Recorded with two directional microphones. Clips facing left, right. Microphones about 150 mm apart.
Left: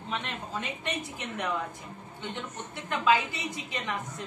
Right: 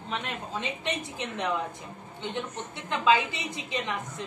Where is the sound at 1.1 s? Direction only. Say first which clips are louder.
Right 2 dB; 25° right (ahead or behind).